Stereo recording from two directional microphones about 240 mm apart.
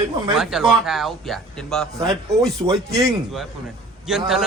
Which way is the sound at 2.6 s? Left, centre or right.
Right.